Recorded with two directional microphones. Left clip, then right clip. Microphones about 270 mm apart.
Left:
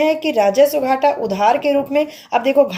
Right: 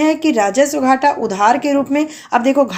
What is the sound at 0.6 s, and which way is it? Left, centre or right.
Speech, right.